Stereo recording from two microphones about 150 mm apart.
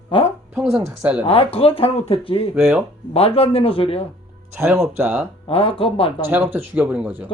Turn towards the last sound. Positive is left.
turn(degrees=-10)  # may be behind; listen again after turning